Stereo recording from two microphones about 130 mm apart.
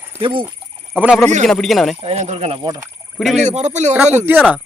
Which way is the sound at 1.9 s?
55° right (ahead or behind).